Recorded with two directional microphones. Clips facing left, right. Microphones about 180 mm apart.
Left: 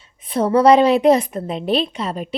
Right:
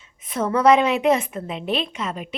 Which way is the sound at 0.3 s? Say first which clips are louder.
Left 4 dB; 35° left (ahead or behind).